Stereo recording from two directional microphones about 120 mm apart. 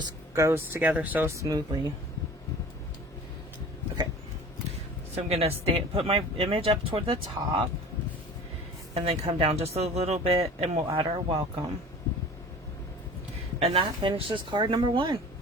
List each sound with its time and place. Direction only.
0.3 s speech: 20° right (ahead or behind)
1.4 s speech: 35° right (ahead or behind)
5.1 s speech: 55° right (ahead or behind)
9.0 s speech: 60° right (ahead or behind)
10.9 s speech: 50° right (ahead or behind)
13.6 s speech: 45° right (ahead or behind)